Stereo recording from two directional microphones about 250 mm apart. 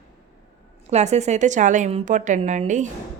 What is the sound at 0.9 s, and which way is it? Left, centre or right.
A woman's voice, right.